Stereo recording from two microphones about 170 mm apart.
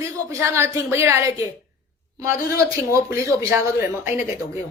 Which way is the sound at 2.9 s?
15° right (ahead or behind).